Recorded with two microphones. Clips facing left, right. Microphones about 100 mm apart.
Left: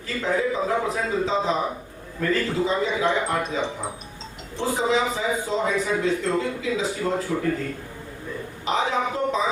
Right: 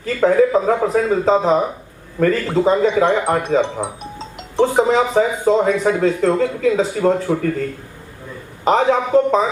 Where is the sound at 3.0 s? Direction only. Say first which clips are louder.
Right 7 dB; 70° right (ahead or behind).